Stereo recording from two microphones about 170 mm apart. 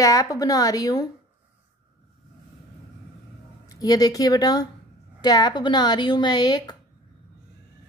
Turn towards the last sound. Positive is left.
turn(degrees=25)  # may be behind; listen again after turning